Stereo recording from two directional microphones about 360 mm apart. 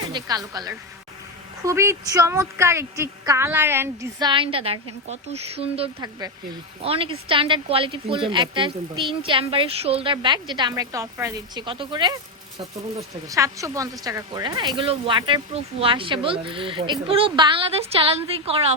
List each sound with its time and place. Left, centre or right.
0.1 s a woman's voice: centre
13.2 s a woman's voice: centre